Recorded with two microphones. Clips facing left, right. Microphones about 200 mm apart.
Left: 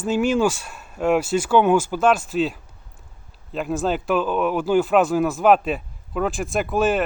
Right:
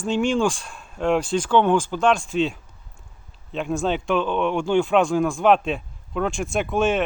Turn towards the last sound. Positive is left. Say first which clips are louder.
# left 1 dB
turn(degrees=0)  # may be behind; listen again after turning